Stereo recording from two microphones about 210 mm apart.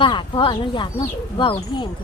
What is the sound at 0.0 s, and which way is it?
Speech, 20° left (ahead or behind).